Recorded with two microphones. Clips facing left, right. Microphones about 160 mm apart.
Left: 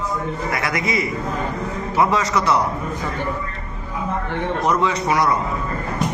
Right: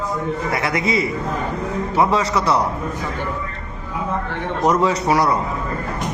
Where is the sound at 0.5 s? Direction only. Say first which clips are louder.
Right 2 dB; 30° right (ahead or behind).